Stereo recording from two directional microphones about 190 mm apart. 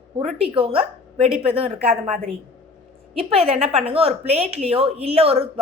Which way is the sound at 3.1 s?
30° right (ahead or behind).